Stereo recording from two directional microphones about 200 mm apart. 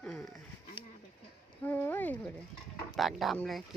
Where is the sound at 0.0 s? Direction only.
Centre (ahead or behind).